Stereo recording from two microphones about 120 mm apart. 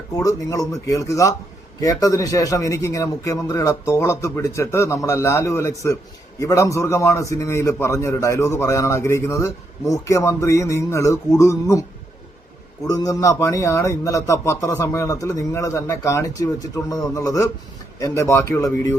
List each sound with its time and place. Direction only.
0.1 s a man's voice: 30° left (ahead or behind)
12.9 s a man's voice: 30° left (ahead or behind)